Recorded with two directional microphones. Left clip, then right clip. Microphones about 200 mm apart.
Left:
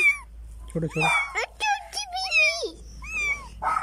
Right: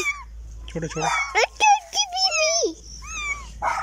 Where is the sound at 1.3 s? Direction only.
10° right (ahead or behind).